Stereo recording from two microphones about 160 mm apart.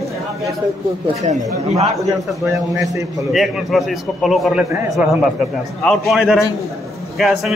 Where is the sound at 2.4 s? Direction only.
20° right (ahead or behind).